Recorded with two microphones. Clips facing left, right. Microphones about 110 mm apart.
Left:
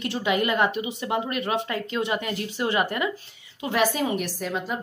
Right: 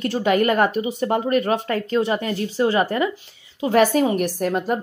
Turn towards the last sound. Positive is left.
turn(degrees=-50)  # may be behind; listen again after turning